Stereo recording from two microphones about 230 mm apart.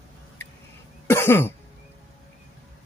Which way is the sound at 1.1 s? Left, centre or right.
Centre.